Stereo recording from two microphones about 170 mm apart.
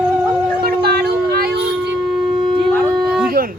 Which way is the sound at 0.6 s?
70° right (ahead or behind).